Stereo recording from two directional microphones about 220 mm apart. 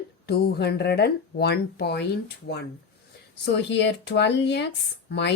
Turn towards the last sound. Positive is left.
turn(degrees=50)  # may be behind; listen again after turning